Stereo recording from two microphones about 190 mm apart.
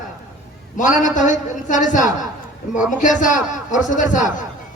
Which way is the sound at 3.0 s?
40° left (ahead or behind).